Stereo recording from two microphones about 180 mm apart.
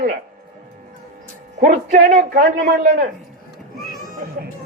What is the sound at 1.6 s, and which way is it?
A man's voice, 50° right (ahead or behind).